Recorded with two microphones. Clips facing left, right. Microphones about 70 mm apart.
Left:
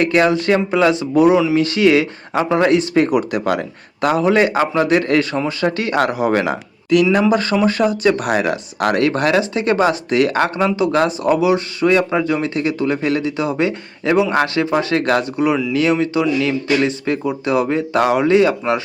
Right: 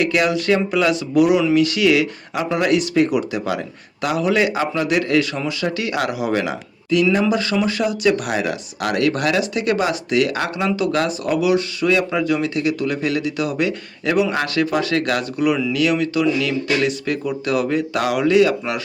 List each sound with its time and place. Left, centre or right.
0.0 s speech: left